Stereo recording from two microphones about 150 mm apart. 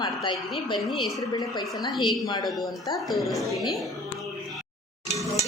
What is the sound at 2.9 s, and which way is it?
Speech, centre (ahead or behind).